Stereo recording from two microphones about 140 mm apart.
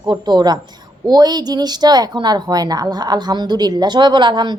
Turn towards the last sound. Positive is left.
turn(degrees=-35)  # may be behind; listen again after turning